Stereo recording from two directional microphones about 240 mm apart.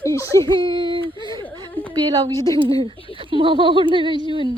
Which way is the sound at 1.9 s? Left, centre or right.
Centre.